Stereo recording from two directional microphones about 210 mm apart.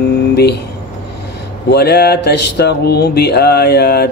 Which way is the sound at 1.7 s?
50° left (ahead or behind).